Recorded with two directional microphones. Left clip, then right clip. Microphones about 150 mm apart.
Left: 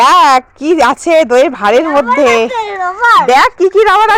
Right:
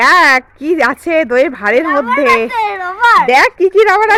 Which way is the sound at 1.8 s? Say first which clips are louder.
Left 3 dB; 35° right (ahead or behind).